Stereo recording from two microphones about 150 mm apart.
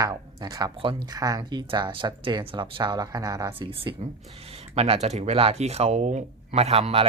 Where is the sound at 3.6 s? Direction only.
35° right (ahead or behind).